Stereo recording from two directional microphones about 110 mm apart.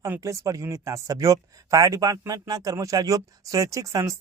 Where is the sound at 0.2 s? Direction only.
30° right (ahead or behind).